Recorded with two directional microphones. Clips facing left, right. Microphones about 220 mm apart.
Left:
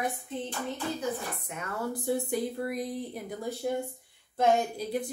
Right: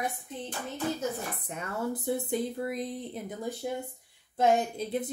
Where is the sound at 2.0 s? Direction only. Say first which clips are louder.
Left 3 dB; 20° right (ahead or behind).